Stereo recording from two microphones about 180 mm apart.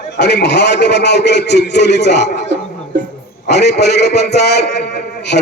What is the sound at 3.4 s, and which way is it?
A man's voice, 70° left (ahead or behind).